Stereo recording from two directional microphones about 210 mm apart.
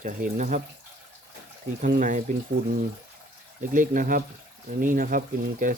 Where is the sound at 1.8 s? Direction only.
40° right (ahead or behind).